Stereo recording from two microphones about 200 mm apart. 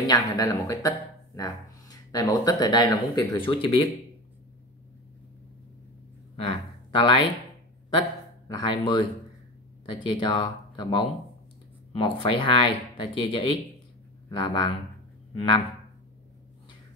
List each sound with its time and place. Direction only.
0.0 s speech: 20° left (ahead or behind)
6.3 s a sound: 25° left (ahead or behind)
8.5 s speech: 25° left (ahead or behind)